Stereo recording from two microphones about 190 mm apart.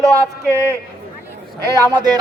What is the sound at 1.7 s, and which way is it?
Speech, 20° right (ahead or behind).